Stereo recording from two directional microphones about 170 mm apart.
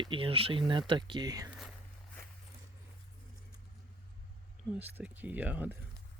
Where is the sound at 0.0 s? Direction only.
30° right (ahead or behind).